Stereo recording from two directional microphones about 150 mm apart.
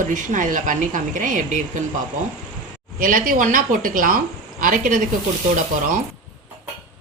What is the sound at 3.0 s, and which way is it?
A woman's voice, 70° right (ahead or behind).